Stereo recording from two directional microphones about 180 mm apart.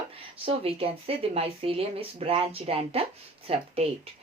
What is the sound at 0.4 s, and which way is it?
Speech, 30° right (ahead or behind).